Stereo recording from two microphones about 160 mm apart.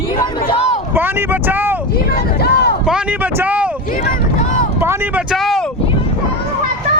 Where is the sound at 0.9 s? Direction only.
10° right (ahead or behind).